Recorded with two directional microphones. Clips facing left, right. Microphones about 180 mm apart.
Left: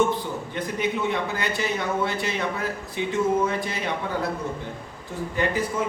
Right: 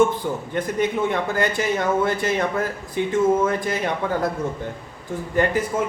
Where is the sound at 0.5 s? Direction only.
50° right (ahead or behind).